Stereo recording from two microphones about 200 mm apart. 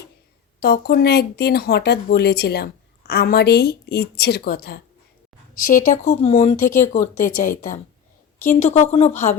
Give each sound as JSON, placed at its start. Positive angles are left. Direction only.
{"t": 0.6, "sound": "speech", "side_deg": 50}
{"t": 5.6, "sound": "speech", "side_deg": 40}